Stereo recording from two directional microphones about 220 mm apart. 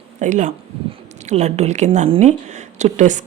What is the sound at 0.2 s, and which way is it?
Speech, 35° right (ahead or behind).